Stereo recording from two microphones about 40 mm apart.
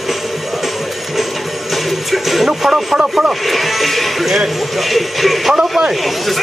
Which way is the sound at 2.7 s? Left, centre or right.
Centre.